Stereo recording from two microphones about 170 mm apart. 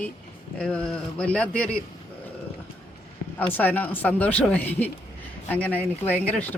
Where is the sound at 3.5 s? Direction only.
10° left (ahead or behind).